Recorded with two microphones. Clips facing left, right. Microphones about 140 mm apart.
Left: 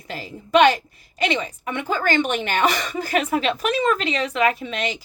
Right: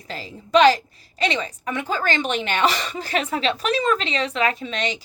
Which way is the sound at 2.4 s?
50° left (ahead or behind).